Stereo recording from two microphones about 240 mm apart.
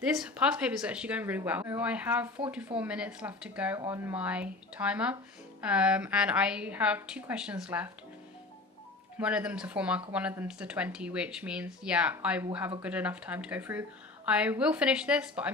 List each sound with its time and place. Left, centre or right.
0.2 s speech: centre
9.2 s speech: centre